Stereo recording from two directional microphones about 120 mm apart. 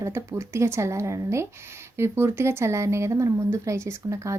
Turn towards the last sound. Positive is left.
turn(degrees=-25)  # may be behind; listen again after turning